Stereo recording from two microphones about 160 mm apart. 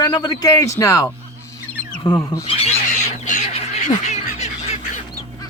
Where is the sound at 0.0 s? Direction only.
25° left (ahead or behind).